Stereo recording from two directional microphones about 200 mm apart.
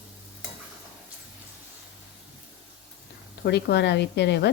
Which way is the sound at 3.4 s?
55° left (ahead or behind).